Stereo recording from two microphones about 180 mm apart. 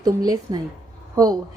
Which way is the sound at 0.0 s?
20° right (ahead or behind).